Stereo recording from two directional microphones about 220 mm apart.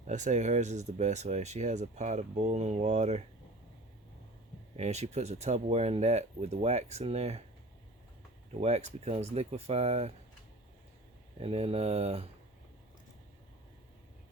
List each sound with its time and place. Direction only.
0.1 s speech: 30° right (ahead or behind)
4.8 s speech: 30° right (ahead or behind)
8.5 s speech: 30° right (ahead or behind)
11.3 s speech: 25° right (ahead or behind)